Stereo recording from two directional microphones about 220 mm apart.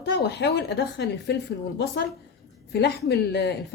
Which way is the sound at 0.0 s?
50° left (ahead or behind).